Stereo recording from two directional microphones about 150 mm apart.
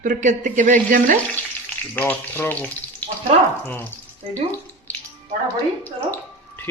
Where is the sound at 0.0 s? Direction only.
55° right (ahead or behind).